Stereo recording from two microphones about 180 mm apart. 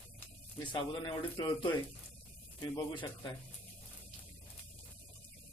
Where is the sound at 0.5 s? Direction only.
25° left (ahead or behind).